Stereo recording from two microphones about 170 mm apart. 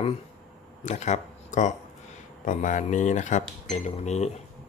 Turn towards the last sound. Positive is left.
turn(degrees=40)  # may be behind; listen again after turning